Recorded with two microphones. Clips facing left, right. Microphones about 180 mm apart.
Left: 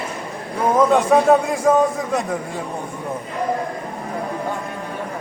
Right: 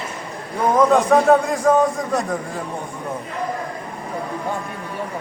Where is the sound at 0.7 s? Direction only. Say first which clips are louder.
Even; centre (ahead or behind).